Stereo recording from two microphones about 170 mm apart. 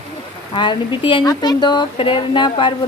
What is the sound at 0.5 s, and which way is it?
Speech, 30° left (ahead or behind).